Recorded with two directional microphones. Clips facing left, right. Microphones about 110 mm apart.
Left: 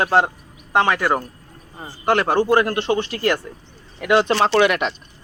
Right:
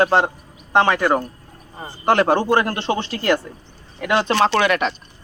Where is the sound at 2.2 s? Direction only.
5° left (ahead or behind).